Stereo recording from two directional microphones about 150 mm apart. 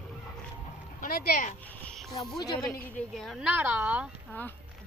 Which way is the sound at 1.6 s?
5° left (ahead or behind).